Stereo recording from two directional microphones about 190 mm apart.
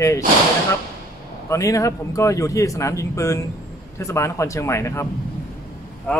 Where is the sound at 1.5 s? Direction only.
15° left (ahead or behind).